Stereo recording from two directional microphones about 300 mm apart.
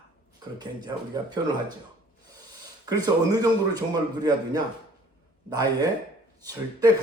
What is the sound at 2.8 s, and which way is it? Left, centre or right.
Speech, centre.